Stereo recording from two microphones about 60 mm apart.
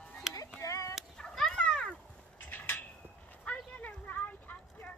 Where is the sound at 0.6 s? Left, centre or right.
Left.